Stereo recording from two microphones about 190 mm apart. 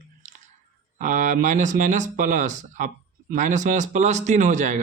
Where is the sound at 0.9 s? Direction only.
40° right (ahead or behind).